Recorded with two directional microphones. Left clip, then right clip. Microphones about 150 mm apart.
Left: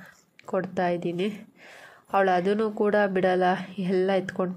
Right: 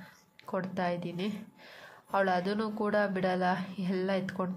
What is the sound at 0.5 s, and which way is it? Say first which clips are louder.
Speech: left 7 dB; 25° left (ahead or behind).